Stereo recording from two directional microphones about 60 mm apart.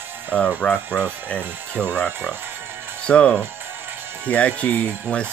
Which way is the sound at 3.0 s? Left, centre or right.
Centre.